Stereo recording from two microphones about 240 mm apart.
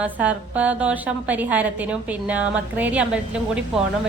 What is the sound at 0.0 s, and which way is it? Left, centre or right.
A woman's voice, centre.